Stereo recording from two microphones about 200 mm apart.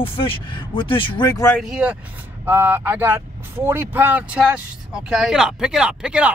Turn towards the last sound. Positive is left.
turn(degrees=-5)  # may be behind; listen again after turning